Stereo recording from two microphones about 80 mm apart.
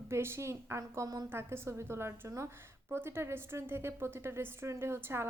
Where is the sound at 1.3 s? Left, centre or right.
Right.